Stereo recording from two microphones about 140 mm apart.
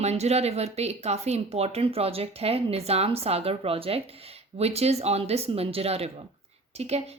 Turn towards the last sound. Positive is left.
turn(degrees=-50)  # may be behind; listen again after turning